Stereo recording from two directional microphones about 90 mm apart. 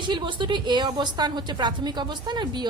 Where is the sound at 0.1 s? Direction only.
60° right (ahead or behind).